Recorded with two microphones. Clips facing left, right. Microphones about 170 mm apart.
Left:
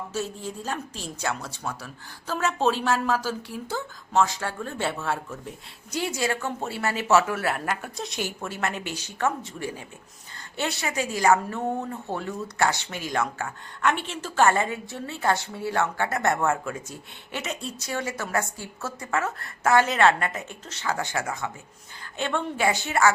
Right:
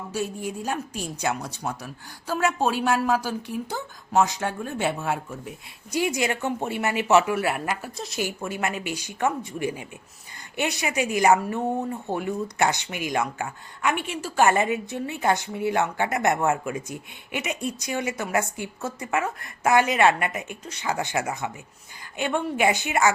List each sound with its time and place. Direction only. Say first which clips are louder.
0.1 s speech: right 6 dB; 15° right (ahead or behind)